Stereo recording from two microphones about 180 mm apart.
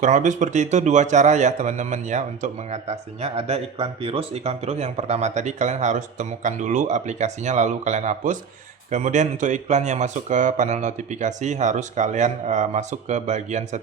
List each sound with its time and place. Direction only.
0.0 s a man's voice: 45° right (ahead or behind)